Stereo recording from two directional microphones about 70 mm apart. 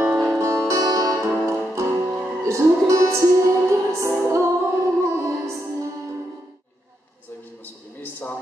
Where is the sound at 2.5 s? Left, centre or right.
Right.